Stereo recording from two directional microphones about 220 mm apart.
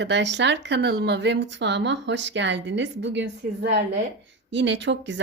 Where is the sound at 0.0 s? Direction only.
55° right (ahead or behind).